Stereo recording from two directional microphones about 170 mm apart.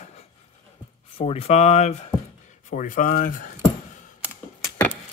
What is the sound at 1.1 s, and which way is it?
Speech, 35° left (ahead or behind).